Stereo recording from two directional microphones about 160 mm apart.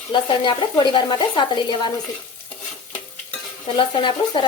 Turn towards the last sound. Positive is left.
turn(degrees=30)  # may be behind; listen again after turning